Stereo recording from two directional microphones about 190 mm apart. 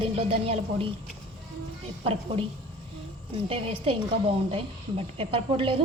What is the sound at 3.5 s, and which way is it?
A woman's voice, 30° right (ahead or behind).